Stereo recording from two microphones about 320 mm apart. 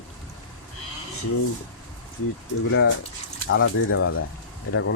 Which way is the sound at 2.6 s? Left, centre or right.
Left.